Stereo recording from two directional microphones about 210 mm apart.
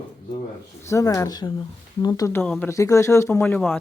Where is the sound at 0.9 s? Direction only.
15° left (ahead or behind).